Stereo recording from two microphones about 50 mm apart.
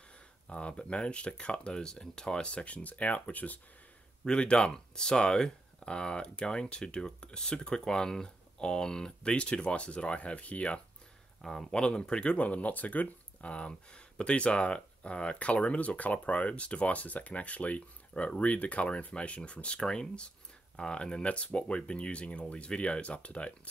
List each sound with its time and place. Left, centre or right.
0.5 s speech: left
4.2 s speech: centre
11.4 s speech: centre